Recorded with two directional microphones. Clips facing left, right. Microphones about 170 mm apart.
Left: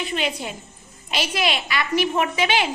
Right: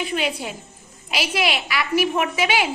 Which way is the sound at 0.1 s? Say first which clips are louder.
Right 1 dB; 10° right (ahead or behind).